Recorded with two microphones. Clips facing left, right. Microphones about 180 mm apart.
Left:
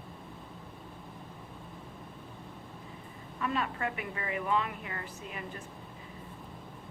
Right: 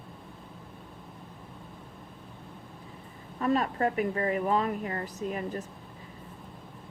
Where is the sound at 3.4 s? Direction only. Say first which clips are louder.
Right 7 dB; 40° right (ahead or behind).